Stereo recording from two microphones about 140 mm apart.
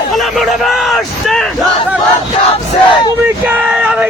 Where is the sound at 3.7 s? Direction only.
5° right (ahead or behind).